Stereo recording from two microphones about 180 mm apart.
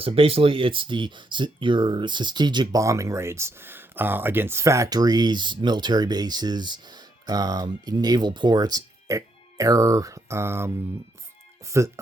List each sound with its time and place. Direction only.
0.0 s speech: 30° right (ahead or behind); by 10.7 s 15° right (ahead or behind)
11.7 s speech: 15° right (ahead or behind)